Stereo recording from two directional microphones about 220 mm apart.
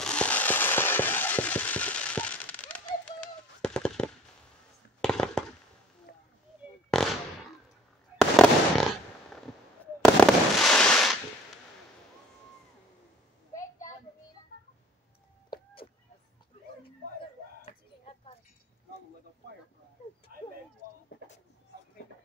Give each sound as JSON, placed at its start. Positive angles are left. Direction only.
{"t": 0.0, "sound": "fireworks", "side_deg": 5}
{"t": 6.9, "sound": "firecracker", "side_deg": 0}
{"t": 8.2, "sound": "fireworks", "side_deg": 5}
{"t": 10.0, "sound": "fireworks", "side_deg": 0}
{"t": 15.5, "sound": "a sound", "side_deg": 25}
{"t": 17.6, "sound": "a sound", "side_deg": 25}